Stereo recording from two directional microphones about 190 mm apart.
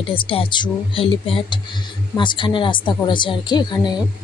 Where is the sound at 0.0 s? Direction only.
25° left (ahead or behind).